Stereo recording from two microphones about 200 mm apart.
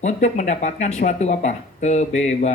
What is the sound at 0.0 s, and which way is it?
Speech, 35° left (ahead or behind).